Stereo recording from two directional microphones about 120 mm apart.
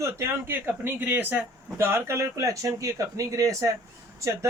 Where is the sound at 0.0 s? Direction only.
20° right (ahead or behind).